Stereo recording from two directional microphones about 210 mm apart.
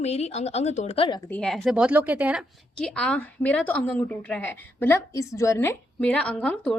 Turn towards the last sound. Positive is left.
turn(degrees=5)  # may be behind; listen again after turning